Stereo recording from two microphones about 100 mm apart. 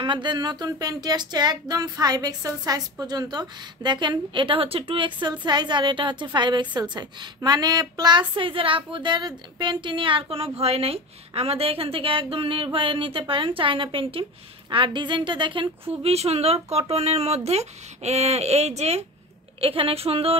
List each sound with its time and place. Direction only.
0.0 s a sound: 55° right (ahead or behind)
16.0 s speech: 90° right
19.6 s a woman's voice: 70° right (ahead or behind)